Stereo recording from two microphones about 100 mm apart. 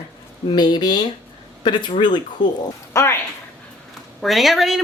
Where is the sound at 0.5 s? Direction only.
45° left (ahead or behind).